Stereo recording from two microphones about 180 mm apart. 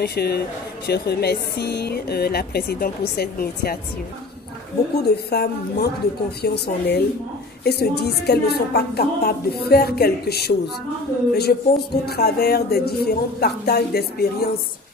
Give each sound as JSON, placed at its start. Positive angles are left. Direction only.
{"t": 0.0, "sound": "speech", "side_deg": 60}
{"t": 5.1, "sound": "speech", "side_deg": 60}